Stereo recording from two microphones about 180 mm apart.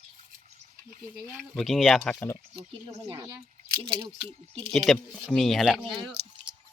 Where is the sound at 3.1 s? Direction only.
20° right (ahead or behind).